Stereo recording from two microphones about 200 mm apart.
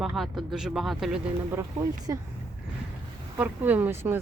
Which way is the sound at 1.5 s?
15° right (ahead or behind).